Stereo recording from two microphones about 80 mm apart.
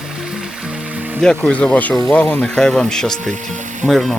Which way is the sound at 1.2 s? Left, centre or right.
Centre.